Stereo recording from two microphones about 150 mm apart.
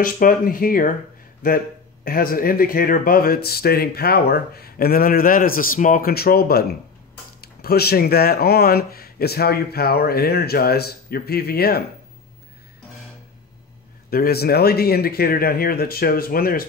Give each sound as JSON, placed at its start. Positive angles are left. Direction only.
{"t": 0.0, "sound": "speech", "side_deg": 70}
{"t": 2.0, "sound": "speech", "side_deg": 75}
{"t": 14.1, "sound": "speech", "side_deg": 90}